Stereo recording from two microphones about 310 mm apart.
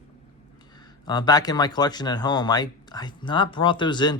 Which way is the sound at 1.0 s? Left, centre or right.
Centre.